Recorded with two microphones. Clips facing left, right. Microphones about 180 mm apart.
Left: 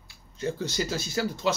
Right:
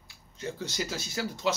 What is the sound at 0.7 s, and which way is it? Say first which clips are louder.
Speech: left 5 dB; 15° right (ahead or behind).